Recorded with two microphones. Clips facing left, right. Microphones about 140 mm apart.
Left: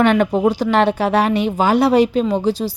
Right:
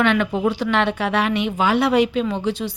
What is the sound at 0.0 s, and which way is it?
A woman's voice, 45° left (ahead or behind).